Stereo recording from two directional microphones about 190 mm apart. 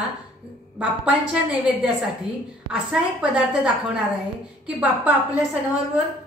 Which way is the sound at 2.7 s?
5° right (ahead or behind).